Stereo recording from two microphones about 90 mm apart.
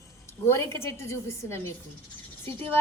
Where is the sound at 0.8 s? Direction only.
30° left (ahead or behind).